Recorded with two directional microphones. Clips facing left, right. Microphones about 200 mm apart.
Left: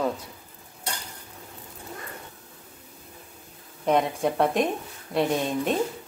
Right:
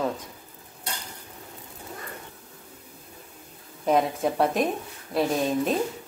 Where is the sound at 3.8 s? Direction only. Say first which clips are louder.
Even; centre (ahead or behind).